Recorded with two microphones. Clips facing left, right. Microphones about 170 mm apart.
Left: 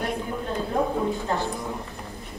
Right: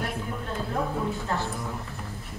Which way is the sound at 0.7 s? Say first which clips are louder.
Left 5 dB; 15° left (ahead or behind).